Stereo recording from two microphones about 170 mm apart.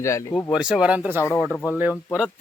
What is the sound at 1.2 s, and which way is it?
Speech, 15° left (ahead or behind).